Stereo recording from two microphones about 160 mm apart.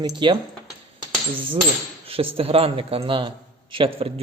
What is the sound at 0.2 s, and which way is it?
Speech, 30° right (ahead or behind).